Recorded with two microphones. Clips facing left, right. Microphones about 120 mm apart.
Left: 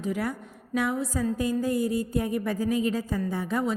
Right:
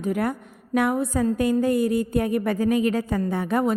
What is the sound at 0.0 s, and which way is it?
A woman's voice, 55° right (ahead or behind).